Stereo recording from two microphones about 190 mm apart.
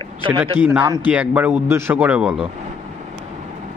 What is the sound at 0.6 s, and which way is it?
Speech, 10° right (ahead or behind).